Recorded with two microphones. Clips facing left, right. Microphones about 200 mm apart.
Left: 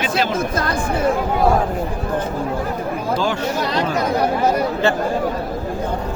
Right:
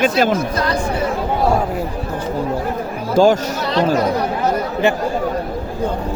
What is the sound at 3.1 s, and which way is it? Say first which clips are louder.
Speech: right 10 dB; 45° right (ahead or behind).